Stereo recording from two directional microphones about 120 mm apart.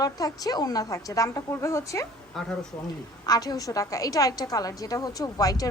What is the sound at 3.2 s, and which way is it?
A woman's voice, 30° left (ahead or behind).